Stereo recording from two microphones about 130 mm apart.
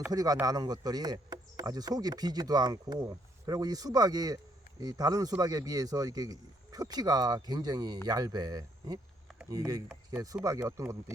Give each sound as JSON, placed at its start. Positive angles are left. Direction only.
{"t": 0.1, "sound": "speech", "side_deg": -30}